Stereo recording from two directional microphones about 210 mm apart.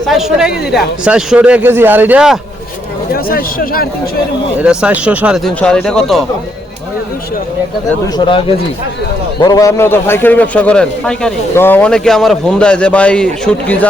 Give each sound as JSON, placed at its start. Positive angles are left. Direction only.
{"t": 0.1, "sound": "speech", "side_deg": 0}
{"t": 3.1, "sound": "speech", "side_deg": 45}
{"t": 4.5, "sound": "speech", "side_deg": -5}
{"t": 8.2, "sound": "a man's voice", "side_deg": 25}